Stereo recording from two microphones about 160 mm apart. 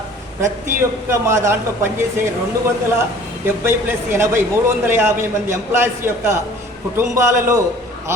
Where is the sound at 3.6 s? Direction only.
15° right (ahead or behind).